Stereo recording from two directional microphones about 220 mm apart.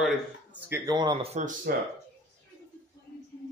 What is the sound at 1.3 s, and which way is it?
Speech, 35° right (ahead or behind).